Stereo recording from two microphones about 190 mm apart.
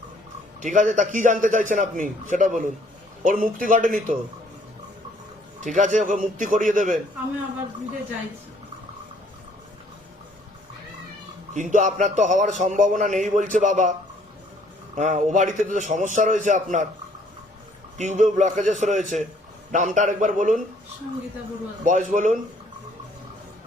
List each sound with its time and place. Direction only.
0.6 s a man's voice: 40° right (ahead or behind)
5.5 s a man's voice: 40° right (ahead or behind)
11.5 s a man's voice: 40° right (ahead or behind)
14.9 s a man's voice: 40° right (ahead or behind)
17.9 s a man's voice: 40° right (ahead or behind)
21.8 s a man's voice: 40° right (ahead or behind)